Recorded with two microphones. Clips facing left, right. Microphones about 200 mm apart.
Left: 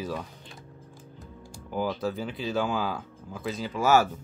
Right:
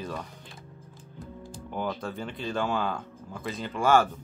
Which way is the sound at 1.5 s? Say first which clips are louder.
Left 3 dB; 5° left (ahead or behind).